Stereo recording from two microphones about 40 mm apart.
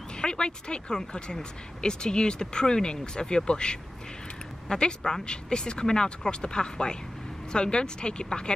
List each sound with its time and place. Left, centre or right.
0.2 s speech: left